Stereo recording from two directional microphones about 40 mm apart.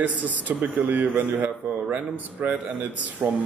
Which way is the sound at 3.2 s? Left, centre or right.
Right.